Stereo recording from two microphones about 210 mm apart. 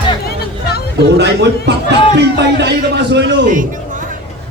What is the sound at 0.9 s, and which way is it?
A man's voice, 55° right (ahead or behind).